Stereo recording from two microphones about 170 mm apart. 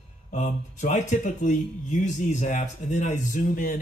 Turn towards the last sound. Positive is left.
turn(degrees=55)  # may be behind; listen again after turning